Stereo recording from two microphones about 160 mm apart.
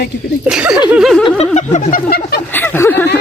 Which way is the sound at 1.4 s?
45° left (ahead or behind).